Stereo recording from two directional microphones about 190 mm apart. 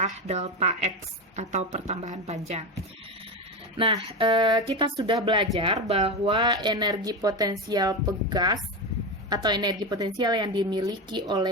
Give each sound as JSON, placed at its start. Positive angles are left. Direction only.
{"t": 0.0, "sound": "a woman's voice", "side_deg": -35}
{"t": 3.8, "sound": "a woman's voice", "side_deg": -30}